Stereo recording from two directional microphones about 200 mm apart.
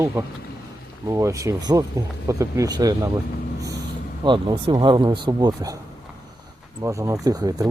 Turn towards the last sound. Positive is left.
turn(degrees=-20)  # may be behind; listen again after turning